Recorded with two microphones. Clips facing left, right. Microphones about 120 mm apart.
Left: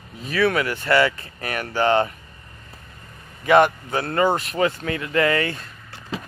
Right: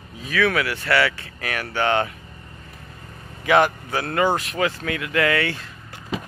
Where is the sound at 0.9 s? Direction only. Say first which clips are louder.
Left 2 dB; 15° left (ahead or behind).